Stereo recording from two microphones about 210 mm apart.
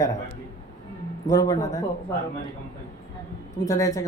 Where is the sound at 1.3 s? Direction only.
15° left (ahead or behind).